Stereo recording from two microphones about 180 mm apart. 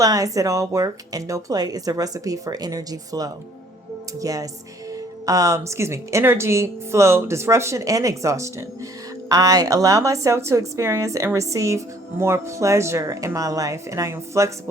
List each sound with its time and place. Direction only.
0.0 s a woman's voice: 20° right (ahead or behind)